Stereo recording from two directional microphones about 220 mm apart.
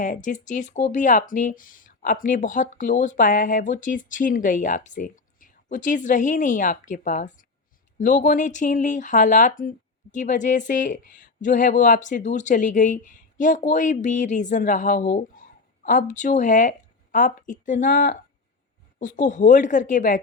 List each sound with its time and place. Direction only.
0.0 s speech: 35° left (ahead or behind)